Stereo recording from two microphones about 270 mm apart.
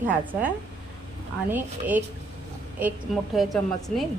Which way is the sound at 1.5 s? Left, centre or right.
Centre.